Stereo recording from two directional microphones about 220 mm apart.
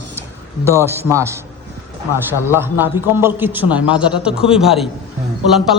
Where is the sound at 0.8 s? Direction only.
10° right (ahead or behind).